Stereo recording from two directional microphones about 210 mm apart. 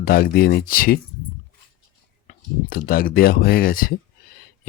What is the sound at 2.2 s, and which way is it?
Speech, 45° left (ahead or behind).